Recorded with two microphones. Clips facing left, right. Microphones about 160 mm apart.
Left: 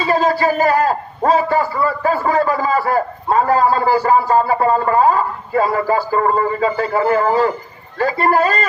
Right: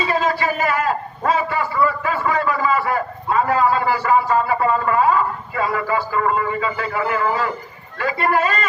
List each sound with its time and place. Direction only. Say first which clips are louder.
0.0 s a man's voice: left 4 dB; 35° left (ahead or behind)